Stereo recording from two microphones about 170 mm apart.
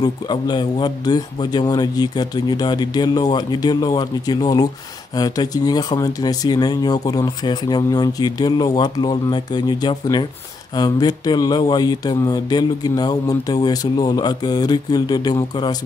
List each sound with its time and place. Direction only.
0.0 s speech: 25° left (ahead or behind)